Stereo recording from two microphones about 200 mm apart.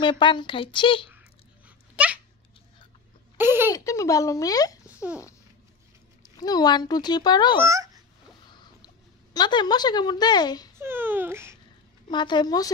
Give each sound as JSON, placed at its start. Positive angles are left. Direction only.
{"t": 0.0, "sound": "speech", "side_deg": 25}
{"t": 2.0, "sound": "dog", "side_deg": -5}
{"t": 3.3, "sound": "speech", "side_deg": -10}
{"t": 3.7, "sound": "speech", "side_deg": 15}
{"t": 6.2, "sound": "speech", "side_deg": 20}
{"t": 7.5, "sound": "speech", "side_deg": -15}
{"t": 8.5, "sound": "a sound", "side_deg": 20}
{"t": 10.8, "sound": "speech", "side_deg": -10}
{"t": 12.1, "sound": "speech", "side_deg": 20}